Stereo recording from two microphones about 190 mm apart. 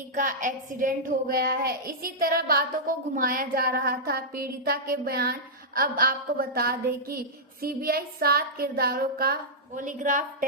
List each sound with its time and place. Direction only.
0.1 s a woman's voice: 45° right (ahead or behind)